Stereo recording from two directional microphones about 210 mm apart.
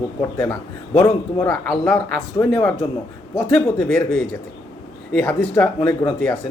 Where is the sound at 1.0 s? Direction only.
15° left (ahead or behind).